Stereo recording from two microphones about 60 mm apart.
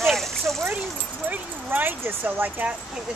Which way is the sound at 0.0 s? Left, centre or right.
Centre.